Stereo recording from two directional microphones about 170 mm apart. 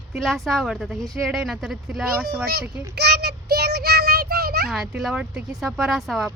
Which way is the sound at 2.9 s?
70° right (ahead or behind).